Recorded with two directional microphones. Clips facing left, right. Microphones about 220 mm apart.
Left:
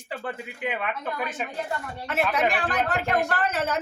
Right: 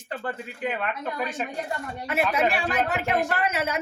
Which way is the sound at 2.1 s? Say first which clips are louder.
Right 1 dB; 10° right (ahead or behind).